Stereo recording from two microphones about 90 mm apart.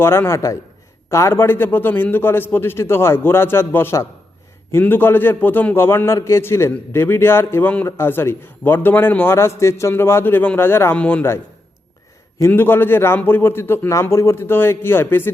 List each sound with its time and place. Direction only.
0.0 s a man's voice: 25° left (ahead or behind)
12.5 s a man's voice: 25° left (ahead or behind)